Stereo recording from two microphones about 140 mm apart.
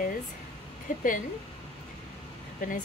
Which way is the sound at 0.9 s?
75° left (ahead or behind).